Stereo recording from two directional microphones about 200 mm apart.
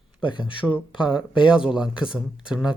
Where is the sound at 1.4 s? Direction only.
5° right (ahead or behind).